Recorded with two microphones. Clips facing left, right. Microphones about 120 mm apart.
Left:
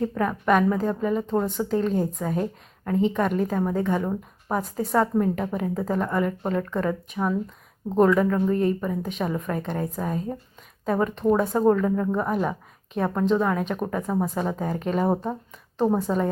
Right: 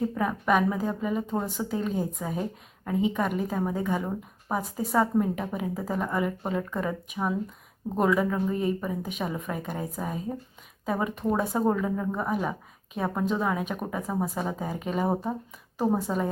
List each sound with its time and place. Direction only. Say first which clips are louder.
0.0 s a woman's voice: left 3 dB; 5° right (ahead or behind)